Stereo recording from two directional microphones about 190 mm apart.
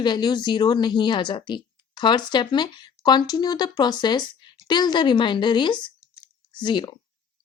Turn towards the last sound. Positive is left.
turn(degrees=20)  # may be behind; listen again after turning